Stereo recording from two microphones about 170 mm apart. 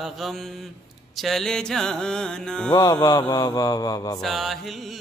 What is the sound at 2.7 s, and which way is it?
Mantra, 20° left (ahead or behind).